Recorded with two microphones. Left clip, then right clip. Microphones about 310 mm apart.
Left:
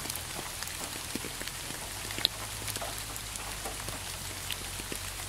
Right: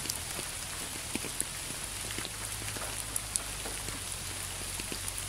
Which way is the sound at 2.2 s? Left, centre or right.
Left.